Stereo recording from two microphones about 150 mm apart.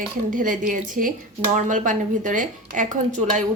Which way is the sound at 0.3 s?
65° right (ahead or behind).